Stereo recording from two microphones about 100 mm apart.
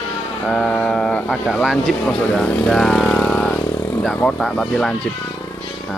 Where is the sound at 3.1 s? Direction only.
10° left (ahead or behind).